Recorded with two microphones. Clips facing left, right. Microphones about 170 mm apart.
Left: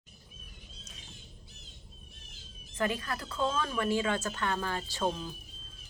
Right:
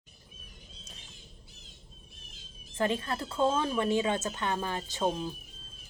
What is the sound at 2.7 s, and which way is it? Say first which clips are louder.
Speech: right 3 dB; 25° right (ahead or behind).